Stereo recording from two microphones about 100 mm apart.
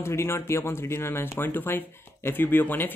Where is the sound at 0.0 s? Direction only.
25° left (ahead or behind).